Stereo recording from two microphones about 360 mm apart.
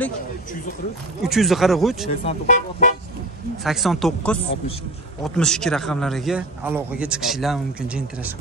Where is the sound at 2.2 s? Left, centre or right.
Centre.